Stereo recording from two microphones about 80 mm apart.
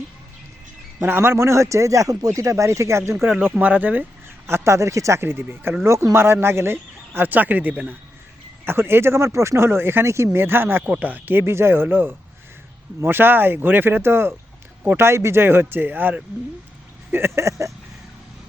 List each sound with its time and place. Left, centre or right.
1.0 s speech: right
3.6 s speech: centre
4.4 s speech: right
5.8 s speech: right